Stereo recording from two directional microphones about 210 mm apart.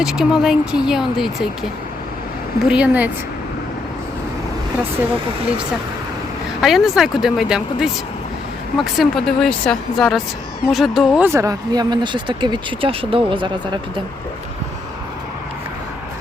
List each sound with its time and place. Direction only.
0.0 s speech: 5° right (ahead or behind)
2.6 s a woman's voice: 5° right (ahead or behind)
6.6 s speech: centre (ahead or behind); by 14.0 s 25° right (ahead or behind)